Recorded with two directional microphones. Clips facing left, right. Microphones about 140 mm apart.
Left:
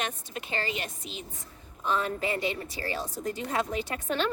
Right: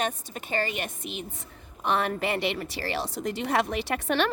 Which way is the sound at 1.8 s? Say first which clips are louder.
Right 2 dB; 70° right (ahead or behind).